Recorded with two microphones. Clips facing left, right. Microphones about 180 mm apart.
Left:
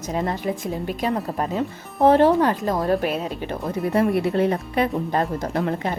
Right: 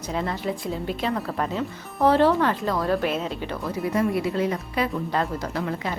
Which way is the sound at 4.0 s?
60° left (ahead or behind).